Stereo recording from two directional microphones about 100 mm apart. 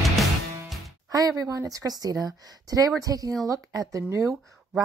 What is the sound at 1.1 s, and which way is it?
A woman's voice, 35° right (ahead or behind).